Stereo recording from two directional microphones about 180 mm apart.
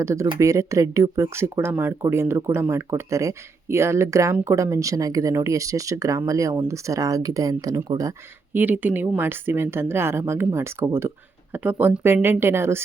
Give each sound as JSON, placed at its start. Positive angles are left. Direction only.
{"t": 0.0, "sound": "speech", "side_deg": -15}
{"t": 8.5, "sound": "speech", "side_deg": -10}